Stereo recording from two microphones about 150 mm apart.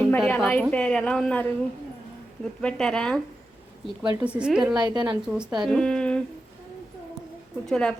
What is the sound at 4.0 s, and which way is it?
Speech, 30° right (ahead or behind).